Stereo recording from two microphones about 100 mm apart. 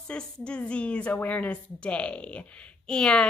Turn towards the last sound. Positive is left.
turn(degrees=10)  # may be behind; listen again after turning